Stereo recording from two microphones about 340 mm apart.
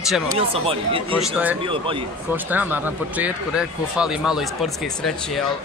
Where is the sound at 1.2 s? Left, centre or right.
Centre.